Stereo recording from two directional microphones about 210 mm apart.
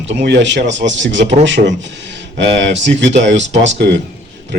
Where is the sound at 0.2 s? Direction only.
55° right (ahead or behind).